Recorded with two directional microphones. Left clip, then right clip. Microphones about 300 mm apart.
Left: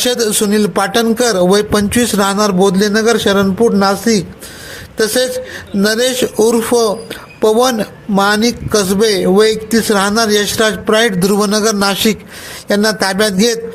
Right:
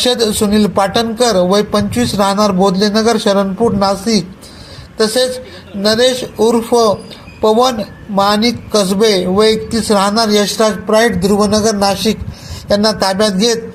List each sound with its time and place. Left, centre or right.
0.0 s a man's voice: left
11.4 s a man's voice: left
11.9 s speech: left